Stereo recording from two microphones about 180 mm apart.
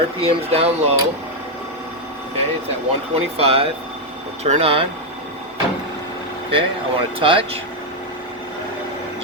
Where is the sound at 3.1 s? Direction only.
35° right (ahead or behind).